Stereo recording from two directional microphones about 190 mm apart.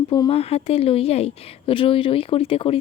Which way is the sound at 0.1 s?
25° left (ahead or behind).